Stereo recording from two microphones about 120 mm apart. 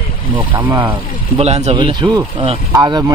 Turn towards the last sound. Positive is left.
turn(degrees=-35)  # may be behind; listen again after turning